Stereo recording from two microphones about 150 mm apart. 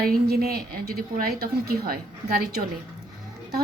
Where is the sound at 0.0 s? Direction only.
85° right.